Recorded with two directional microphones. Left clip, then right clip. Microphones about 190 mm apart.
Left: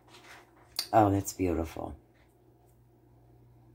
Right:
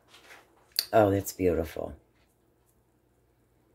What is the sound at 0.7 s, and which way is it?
Speech, 40° right (ahead or behind).